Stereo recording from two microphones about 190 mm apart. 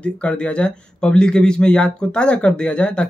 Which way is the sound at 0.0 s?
5° left (ahead or behind).